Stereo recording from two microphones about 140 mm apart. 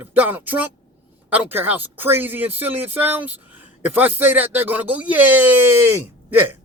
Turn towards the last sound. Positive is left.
turn(degrees=-15)  # may be behind; listen again after turning